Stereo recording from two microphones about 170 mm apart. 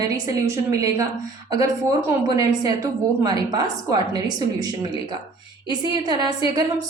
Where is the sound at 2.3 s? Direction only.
25° right (ahead or behind).